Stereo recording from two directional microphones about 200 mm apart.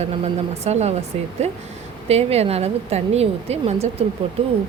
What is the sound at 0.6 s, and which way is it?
A woman's voice, 35° right (ahead or behind).